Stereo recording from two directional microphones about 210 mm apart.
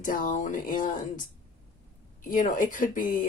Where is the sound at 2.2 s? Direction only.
40° left (ahead or behind).